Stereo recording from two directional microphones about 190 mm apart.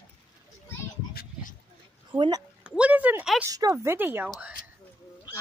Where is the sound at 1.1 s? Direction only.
50° left (ahead or behind).